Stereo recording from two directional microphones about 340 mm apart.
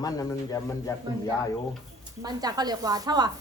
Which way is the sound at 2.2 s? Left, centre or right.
Centre.